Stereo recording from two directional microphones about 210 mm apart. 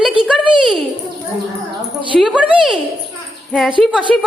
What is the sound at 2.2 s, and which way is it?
A woman's voice, 5° right (ahead or behind).